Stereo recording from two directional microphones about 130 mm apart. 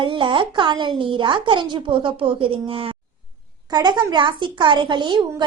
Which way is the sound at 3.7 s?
35° right (ahead or behind).